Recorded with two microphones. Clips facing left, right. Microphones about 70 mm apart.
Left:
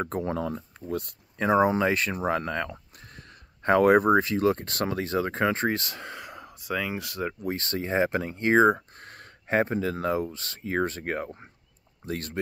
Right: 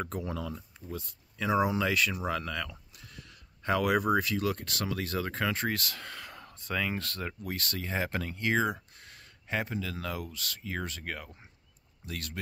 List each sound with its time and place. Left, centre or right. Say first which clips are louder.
0.0 s speech: left 7 dB; left; by 7.5 s centre
7.5 s speech: left 8 dB; left